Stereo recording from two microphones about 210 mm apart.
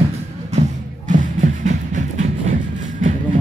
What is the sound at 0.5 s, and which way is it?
Music, 35° right (ahead or behind).